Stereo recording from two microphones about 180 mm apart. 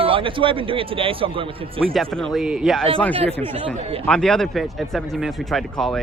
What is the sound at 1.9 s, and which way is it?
Speech, centre (ahead or behind).